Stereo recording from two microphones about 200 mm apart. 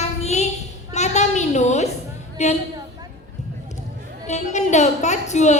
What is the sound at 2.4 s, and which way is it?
Speech, 35° left (ahead or behind).